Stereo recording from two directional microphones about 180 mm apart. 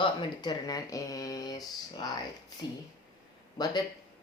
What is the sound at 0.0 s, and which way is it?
Speech, 25° left (ahead or behind).